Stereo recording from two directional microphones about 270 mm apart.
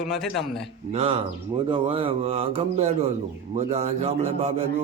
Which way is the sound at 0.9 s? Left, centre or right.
Right.